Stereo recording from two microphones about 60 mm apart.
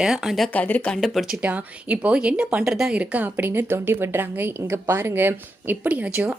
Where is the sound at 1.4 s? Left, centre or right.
Right.